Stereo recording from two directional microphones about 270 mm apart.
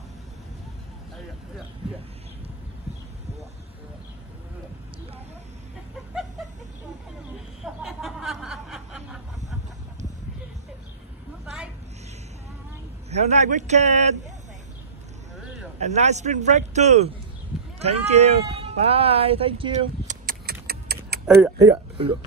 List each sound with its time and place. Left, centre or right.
7.6 s snicker: centre
13.1 s speech: right
15.8 s speech: right
20.6 s a sound: right
21.6 s speech: centre